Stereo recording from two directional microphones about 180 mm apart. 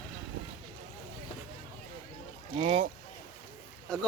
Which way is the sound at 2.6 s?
35° right (ahead or behind).